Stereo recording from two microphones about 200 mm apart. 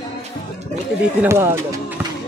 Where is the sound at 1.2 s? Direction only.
15° right (ahead or behind).